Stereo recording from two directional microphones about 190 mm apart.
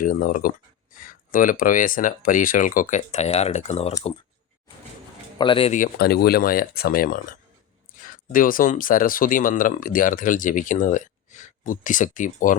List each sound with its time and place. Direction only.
0.0 s speech: 45° left (ahead or behind)
5.4 s speech: 25° left (ahead or behind)
5.7 s speech: 50° left (ahead or behind)
8.3 s speech: 45° left (ahead or behind)